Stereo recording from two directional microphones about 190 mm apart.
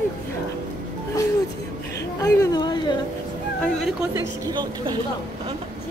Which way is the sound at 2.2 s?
20° left (ahead or behind).